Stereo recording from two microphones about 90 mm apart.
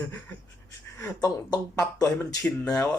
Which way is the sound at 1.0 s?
40° left (ahead or behind).